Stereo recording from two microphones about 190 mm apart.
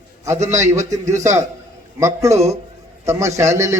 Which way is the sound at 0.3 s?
15° right (ahead or behind).